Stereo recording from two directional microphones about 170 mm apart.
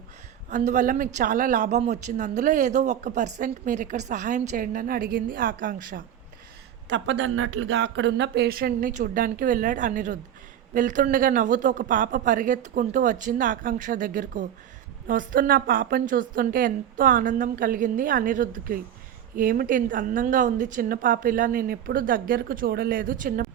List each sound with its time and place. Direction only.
0.5 s a woman's voice: 45° right (ahead or behind)
6.8 s a woman's voice: 90° right; by 23.5 s 55° right (ahead or behind)